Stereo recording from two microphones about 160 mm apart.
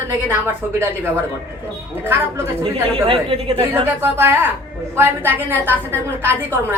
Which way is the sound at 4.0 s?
15° right (ahead or behind).